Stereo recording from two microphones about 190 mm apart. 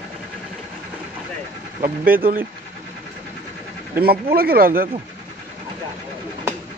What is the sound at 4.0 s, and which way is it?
Speech, 55° right (ahead or behind).